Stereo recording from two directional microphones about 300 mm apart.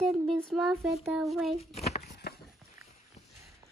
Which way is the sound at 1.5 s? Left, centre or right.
Left.